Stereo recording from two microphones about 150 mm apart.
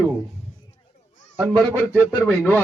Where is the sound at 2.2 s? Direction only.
15° left (ahead or behind).